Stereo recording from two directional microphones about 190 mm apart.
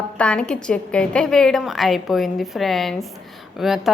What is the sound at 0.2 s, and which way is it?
A woman's voice, 5° left (ahead or behind).